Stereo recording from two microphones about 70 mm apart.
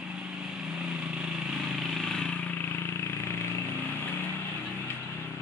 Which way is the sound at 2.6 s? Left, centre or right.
Left.